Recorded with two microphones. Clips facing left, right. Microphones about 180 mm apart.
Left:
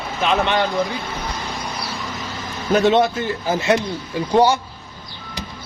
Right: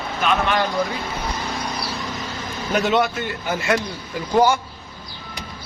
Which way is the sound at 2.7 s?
30° left (ahead or behind).